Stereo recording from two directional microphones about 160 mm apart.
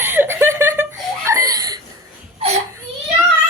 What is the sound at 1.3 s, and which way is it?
Laughter, 20° right (ahead or behind).